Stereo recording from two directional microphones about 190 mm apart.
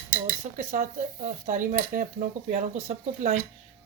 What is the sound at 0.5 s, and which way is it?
Speech, 45° right (ahead or behind).